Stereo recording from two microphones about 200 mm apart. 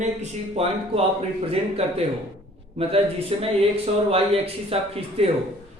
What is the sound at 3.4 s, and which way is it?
Speech, 30° right (ahead or behind).